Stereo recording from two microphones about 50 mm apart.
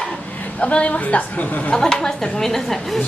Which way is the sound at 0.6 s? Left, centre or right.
Left.